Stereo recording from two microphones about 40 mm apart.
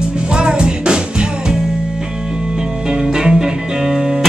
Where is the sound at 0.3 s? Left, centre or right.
Right.